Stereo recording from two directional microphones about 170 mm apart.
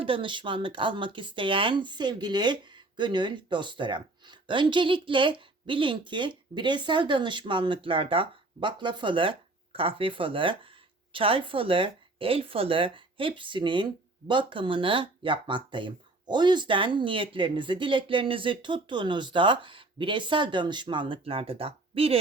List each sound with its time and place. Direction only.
0.0 s speech: 30° right (ahead or behind)